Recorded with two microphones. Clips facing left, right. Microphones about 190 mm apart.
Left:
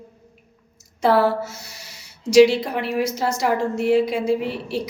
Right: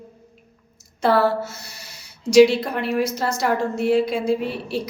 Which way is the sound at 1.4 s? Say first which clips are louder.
Even; 65° right (ahead or behind).